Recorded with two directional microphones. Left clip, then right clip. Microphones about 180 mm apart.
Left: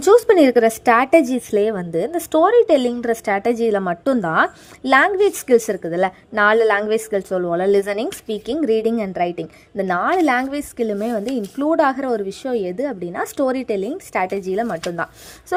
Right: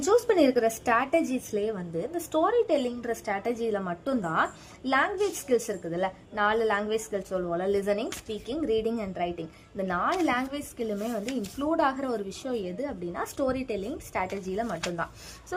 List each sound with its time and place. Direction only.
0.0 s a woman's voice: 45° left (ahead or behind)